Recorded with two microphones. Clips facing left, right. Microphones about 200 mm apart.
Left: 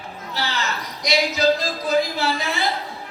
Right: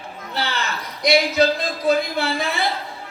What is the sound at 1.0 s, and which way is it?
Speech, 55° right (ahead or behind).